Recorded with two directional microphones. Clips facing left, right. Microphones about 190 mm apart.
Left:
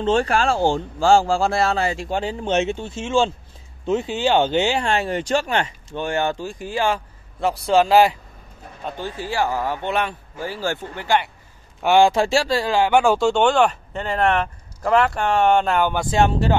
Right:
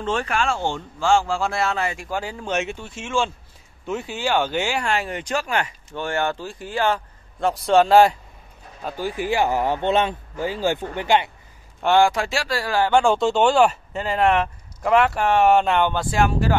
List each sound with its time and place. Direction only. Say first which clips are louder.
0.0 s speech: left 5 dB; 30° left (ahead or behind); by 8.2 s 5° left (ahead or behind)
8.8 s speech: right 3 dB; 10° right (ahead or behind)
12.0 s speech: left 3 dB; 25° left (ahead or behind); by 15.9 s centre (ahead or behind)
15.9 s speech: left 2 dB; 15° left (ahead or behind)
16.2 s speech: left 2 dB; 25° left (ahead or behind)